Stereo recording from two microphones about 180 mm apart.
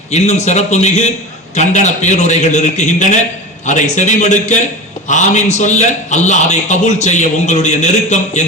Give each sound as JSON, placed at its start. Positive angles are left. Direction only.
{"t": 0.1, "sound": "a man's voice", "side_deg": 40}